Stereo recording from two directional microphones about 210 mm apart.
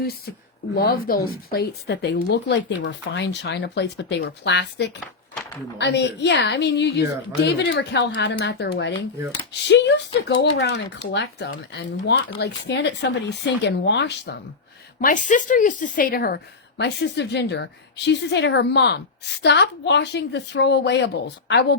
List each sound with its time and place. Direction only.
0.7 s a woman's voice: 50° left (ahead or behind)
15.0 s a woman's voice: 35° left (ahead or behind); by 21.8 s 55° left (ahead or behind)